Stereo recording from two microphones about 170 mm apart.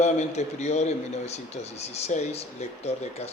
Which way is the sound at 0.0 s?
40° left (ahead or behind).